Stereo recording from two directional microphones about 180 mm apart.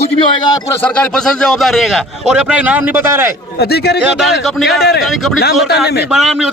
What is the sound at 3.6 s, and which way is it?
Speech, 65° left (ahead or behind).